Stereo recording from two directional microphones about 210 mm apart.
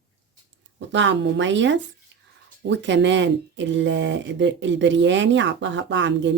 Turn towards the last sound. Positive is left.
turn(degrees=-60)  # may be behind; listen again after turning